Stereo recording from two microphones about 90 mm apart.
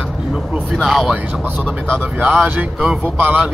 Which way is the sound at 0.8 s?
Centre (ahead or behind).